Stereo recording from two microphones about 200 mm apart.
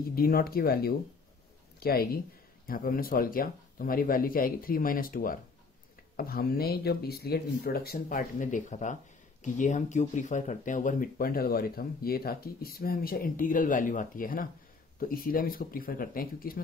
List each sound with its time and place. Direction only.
0.1 s speech: 50° left (ahead or behind)